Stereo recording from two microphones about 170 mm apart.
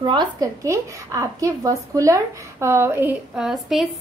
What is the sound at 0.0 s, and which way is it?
A woman's voice, 25° right (ahead or behind).